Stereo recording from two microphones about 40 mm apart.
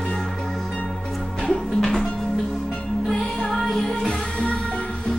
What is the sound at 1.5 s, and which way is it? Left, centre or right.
Music, centre.